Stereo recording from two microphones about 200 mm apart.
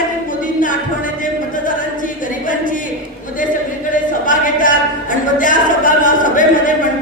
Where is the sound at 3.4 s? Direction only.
40° left (ahead or behind).